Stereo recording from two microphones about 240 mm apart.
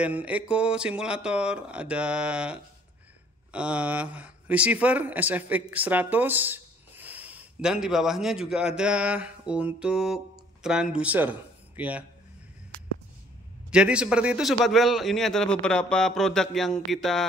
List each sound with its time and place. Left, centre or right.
0.0 s a man's voice: centre
13.7 s a man's voice: centre